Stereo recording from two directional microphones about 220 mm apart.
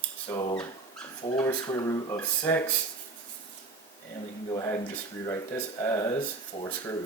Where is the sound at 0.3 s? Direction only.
20° left (ahead or behind).